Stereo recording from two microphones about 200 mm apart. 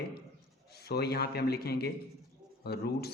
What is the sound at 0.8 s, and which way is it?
A man's voice, 55° left (ahead or behind).